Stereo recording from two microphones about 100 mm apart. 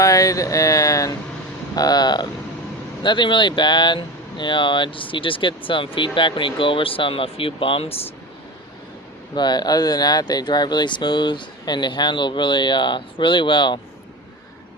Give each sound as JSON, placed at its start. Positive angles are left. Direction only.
{"t": 0.0, "sound": "speech", "side_deg": 35}
{"t": 9.3, "sound": "speech", "side_deg": 45}